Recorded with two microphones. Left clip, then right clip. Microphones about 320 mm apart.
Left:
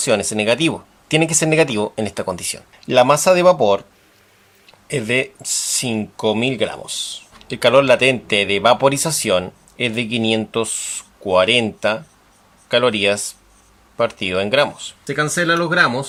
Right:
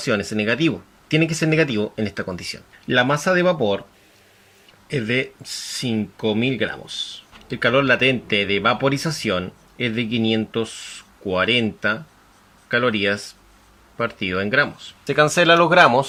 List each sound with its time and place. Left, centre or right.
0.0 s speech: centre
4.9 s speech: centre
15.0 s speech: centre